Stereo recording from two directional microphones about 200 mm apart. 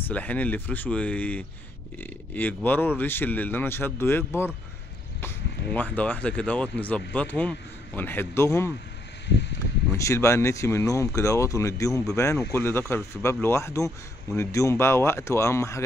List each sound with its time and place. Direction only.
0.1 s speech: 10° left (ahead or behind)
9.9 s speech: 15° left (ahead or behind)